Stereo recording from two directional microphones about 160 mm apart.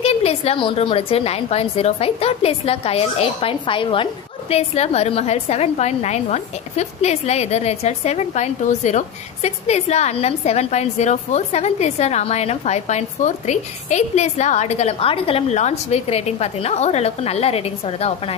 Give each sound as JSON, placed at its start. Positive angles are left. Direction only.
{"t": 0.0, "sound": "a woman's voice", "side_deg": 40}